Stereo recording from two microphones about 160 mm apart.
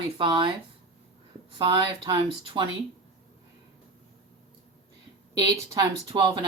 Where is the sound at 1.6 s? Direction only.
30° right (ahead or behind).